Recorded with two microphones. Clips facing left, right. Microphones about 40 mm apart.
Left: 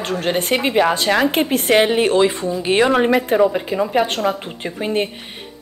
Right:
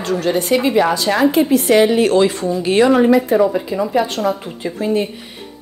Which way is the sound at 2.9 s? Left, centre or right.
Left.